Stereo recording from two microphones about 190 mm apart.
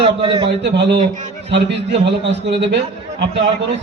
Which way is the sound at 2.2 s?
65° right (ahead or behind).